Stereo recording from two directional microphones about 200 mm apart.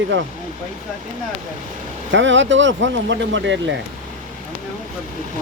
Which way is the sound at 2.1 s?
65° right (ahead or behind).